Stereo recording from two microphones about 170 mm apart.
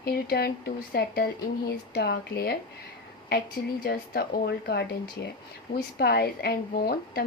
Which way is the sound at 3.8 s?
65° left (ahead or behind).